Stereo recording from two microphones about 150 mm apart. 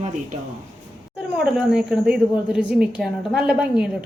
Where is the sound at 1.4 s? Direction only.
5° right (ahead or behind).